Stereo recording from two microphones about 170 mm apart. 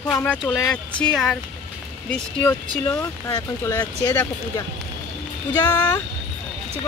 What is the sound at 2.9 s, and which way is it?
Speech, 20° left (ahead or behind).